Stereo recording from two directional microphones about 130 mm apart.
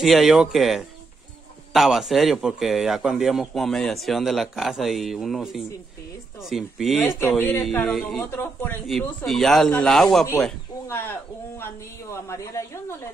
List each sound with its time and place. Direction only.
0.0 s a man's voice: centre (ahead or behind)
7.1 s speech: 15° left (ahead or behind)
7.8 s a man's voice: centre (ahead or behind)
8.4 s speech: 15° left (ahead or behind)
8.8 s a man's voice: centre (ahead or behind)
10.9 s speech: 15° left (ahead or behind)